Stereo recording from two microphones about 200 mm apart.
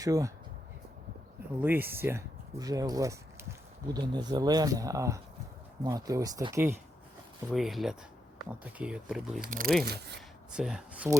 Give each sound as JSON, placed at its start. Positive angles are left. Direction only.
{"t": 0.0, "sound": "speech", "side_deg": -15}
{"t": 1.6, "sound": "speech", "side_deg": -10}
{"t": 7.5, "sound": "speech", "side_deg": 0}
{"t": 9.4, "sound": "speech", "side_deg": -45}
{"t": 9.8, "sound": "speech", "side_deg": -55}
{"t": 10.5, "sound": "speech", "side_deg": 0}